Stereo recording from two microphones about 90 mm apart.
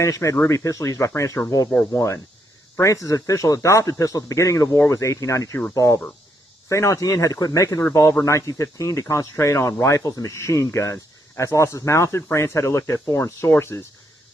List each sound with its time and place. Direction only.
0.0 s speech: 35° left (ahead or behind)
6.7 s speech: 35° left (ahead or behind)